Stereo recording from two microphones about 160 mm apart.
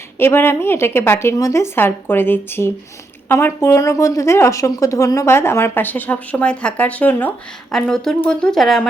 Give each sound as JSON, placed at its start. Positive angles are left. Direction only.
{"t": 0.2, "sound": "speech", "side_deg": 15}